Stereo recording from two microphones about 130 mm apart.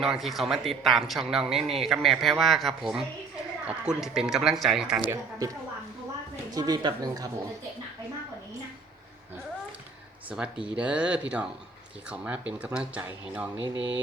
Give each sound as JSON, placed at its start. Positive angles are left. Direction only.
{"t": 0.0, "sound": "a man's voice", "side_deg": 0}
{"t": 1.5, "sound": "speech", "side_deg": -50}
{"t": 1.8, "sound": "a man's voice", "side_deg": 0}
{"t": 5.1, "sound": "speech", "side_deg": -25}
{"t": 10.2, "sound": "speech", "side_deg": -5}